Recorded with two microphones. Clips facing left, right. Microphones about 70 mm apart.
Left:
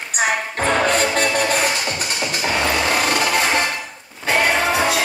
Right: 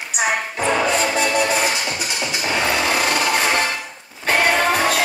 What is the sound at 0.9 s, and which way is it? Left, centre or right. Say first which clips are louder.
Music: left 1 dB; left.